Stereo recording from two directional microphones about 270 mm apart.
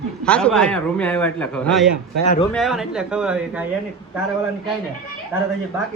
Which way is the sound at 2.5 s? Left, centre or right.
Centre.